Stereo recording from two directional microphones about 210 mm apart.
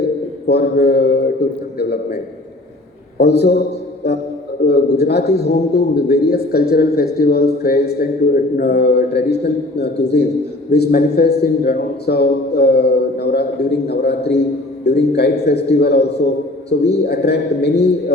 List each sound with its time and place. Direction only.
0.0 s a sound: 50° left (ahead or behind)
1.8 s a man's voice: 50° left (ahead or behind)
3.2 s a man's voice: 50° left (ahead or behind)